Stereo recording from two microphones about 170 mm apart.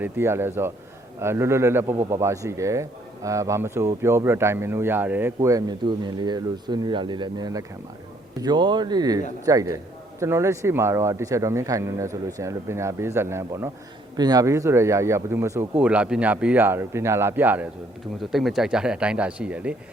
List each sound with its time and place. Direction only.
0.0 s speech: 15° right (ahead or behind)